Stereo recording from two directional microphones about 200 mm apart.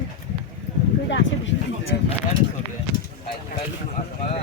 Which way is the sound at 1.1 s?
65° left (ahead or behind).